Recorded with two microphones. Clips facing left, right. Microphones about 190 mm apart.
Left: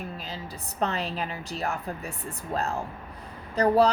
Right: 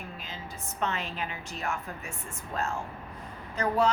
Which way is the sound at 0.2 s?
35° left (ahead or behind).